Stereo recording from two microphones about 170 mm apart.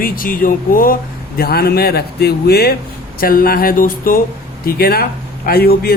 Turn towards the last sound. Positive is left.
turn(degrees=65)  # may be behind; listen again after turning